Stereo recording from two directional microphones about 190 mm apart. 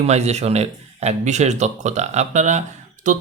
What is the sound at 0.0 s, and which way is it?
A man's voice, 35° right (ahead or behind).